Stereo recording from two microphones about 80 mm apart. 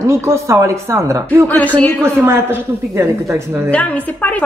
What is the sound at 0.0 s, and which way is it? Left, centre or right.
Speech, right.